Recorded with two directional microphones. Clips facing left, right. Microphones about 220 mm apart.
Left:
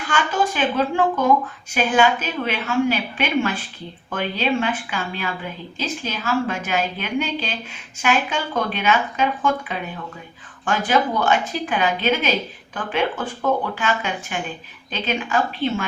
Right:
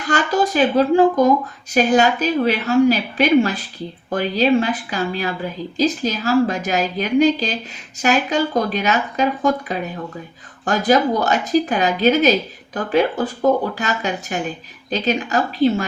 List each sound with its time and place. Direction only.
0.0 s speech: 40° right (ahead or behind)